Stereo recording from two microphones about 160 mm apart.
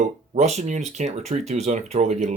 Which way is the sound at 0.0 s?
45° right (ahead or behind).